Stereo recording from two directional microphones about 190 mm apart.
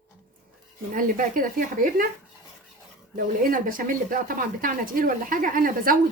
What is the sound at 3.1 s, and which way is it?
Speech, 45° right (ahead or behind).